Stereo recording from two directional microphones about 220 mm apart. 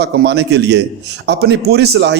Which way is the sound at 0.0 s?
50° right (ahead or behind).